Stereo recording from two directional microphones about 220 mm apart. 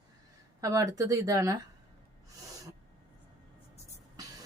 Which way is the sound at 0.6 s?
15° right (ahead or behind).